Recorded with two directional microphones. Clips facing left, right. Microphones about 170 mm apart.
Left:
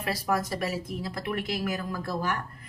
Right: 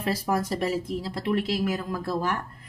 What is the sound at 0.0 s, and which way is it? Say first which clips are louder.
Speech: right 2 dB; 30° right (ahead or behind).